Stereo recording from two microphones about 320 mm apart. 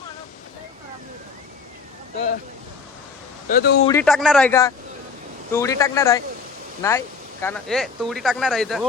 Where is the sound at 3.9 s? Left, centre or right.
Centre.